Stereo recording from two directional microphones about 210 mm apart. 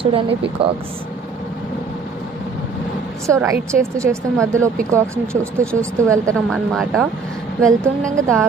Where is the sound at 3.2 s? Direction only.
15° right (ahead or behind).